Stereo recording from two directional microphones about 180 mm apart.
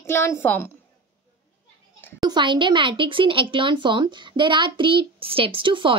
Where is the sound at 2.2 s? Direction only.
25° right (ahead or behind).